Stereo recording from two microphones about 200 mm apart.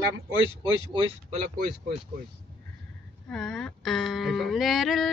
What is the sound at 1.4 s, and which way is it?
Speech, 50° right (ahead or behind).